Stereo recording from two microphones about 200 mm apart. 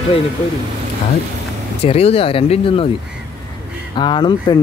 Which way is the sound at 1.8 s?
30° left (ahead or behind).